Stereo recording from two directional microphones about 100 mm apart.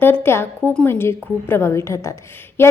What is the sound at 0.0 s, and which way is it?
A woman's voice, 20° left (ahead or behind).